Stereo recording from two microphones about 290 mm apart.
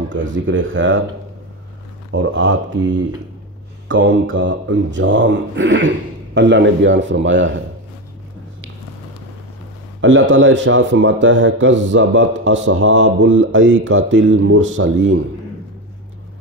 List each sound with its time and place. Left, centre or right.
0.3 s speech: right
2.1 s speech: right
10.0 s speech: right